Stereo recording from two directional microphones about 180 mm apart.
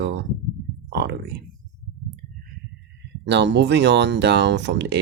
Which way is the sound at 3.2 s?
75° right (ahead or behind).